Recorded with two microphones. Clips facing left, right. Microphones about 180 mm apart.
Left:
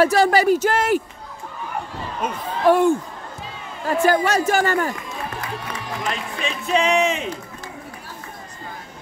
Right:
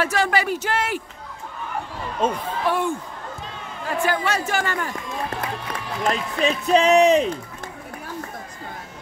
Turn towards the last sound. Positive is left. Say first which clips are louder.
# right 4 dB
turn(degrees=-40)  # may be behind; listen again after turning